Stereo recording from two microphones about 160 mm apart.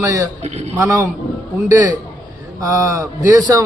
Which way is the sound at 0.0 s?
20° right (ahead or behind).